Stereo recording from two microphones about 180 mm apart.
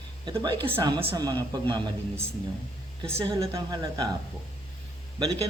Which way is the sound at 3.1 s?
30° right (ahead or behind).